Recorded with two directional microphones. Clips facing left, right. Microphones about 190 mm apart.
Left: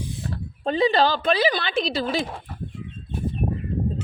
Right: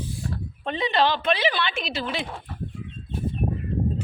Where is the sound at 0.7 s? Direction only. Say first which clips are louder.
Left 4 dB; 35° left (ahead or behind).